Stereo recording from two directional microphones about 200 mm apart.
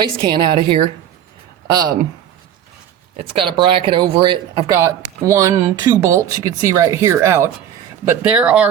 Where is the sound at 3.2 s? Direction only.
25° right (ahead or behind).